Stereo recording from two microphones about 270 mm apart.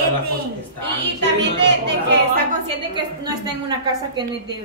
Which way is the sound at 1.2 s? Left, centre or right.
Right.